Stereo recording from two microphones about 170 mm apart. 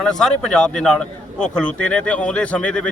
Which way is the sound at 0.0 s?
5° left (ahead or behind).